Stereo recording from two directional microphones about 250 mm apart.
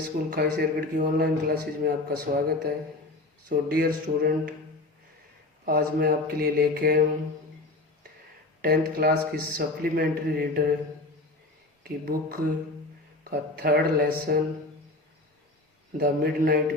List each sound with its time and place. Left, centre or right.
0.3 s a man's voice: right
5.6 s a man's voice: right
8.6 s a man's voice: right
11.8 s a man's voice: right
16.0 s a man's voice: right